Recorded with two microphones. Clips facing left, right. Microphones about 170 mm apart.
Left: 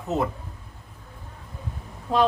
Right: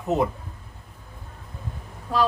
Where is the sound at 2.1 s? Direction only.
25° left (ahead or behind).